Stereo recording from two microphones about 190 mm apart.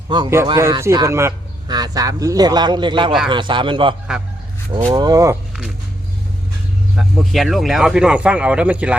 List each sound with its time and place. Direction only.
0.1 s speech: 25° right (ahead or behind)
4.9 s speech: 20° right (ahead or behind)
6.9 s speech: centre (ahead or behind)